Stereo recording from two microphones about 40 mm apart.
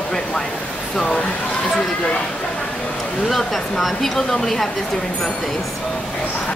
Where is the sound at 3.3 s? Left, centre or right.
Centre.